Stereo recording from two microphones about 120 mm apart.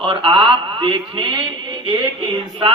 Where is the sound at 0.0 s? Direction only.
50° right (ahead or behind).